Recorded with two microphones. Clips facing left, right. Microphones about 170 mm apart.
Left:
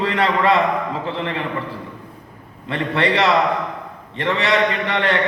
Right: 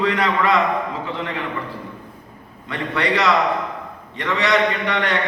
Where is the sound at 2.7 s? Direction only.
30° left (ahead or behind).